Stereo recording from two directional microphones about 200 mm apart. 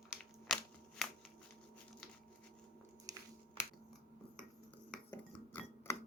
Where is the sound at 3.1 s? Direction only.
15° right (ahead or behind).